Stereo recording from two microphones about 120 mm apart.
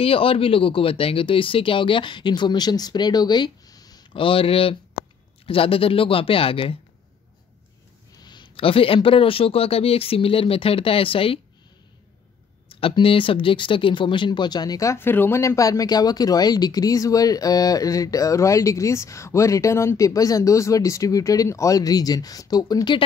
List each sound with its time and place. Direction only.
0.0 s speech: 50° left (ahead or behind); by 4.0 s 30° left (ahead or behind)
4.1 s speech: 50° left (ahead or behind)
8.2 s speech: 40° left (ahead or behind)
12.6 s speech: 50° left (ahead or behind)